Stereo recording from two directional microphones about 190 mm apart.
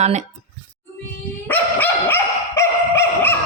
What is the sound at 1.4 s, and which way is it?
Dog, 10° left (ahead or behind).